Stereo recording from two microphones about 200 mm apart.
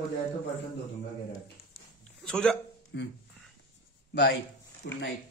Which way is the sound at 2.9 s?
60° left (ahead or behind).